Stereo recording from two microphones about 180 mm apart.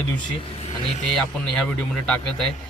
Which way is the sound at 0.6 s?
35° left (ahead or behind).